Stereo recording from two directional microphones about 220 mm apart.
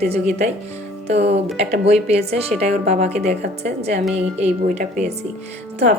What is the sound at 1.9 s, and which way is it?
A woman's voice, 30° right (ahead or behind).